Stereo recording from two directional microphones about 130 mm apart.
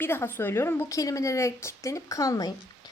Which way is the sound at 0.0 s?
15° left (ahead or behind).